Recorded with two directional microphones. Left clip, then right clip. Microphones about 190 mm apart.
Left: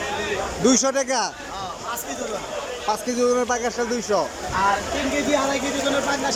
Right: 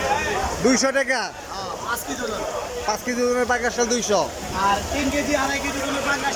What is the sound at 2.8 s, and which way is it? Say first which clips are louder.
A man's voice: left 2 dB; 10° left (ahead or behind).